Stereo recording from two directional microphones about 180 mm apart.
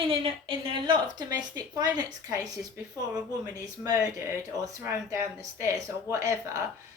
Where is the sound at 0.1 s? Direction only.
30° right (ahead or behind).